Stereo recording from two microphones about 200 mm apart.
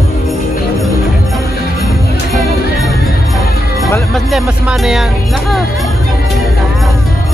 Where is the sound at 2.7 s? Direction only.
Centre (ahead or behind).